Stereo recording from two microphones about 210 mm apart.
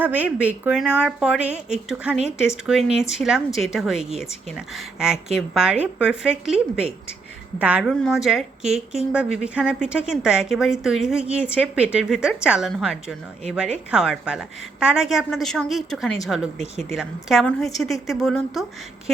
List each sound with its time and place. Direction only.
0.0 s a woman's voice: 10° right (ahead or behind)